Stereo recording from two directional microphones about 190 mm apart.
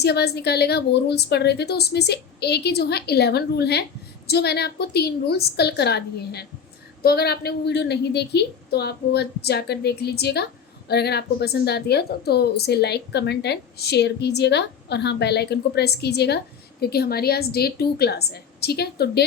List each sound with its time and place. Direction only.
0.0 s a woman's voice: 60° left (ahead or behind)